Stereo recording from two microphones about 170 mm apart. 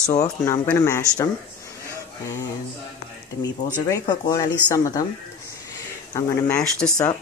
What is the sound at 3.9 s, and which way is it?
Speech, 20° left (ahead or behind).